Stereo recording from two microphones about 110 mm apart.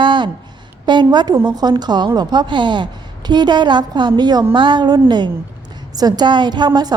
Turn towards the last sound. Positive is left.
turn(degrees=-40)  # may be behind; listen again after turning